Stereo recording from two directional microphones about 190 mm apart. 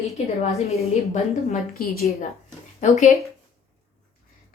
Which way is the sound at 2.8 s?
40° left (ahead or behind).